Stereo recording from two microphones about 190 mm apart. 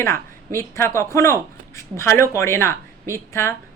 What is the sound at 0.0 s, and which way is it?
A man's voice, 15° left (ahead or behind).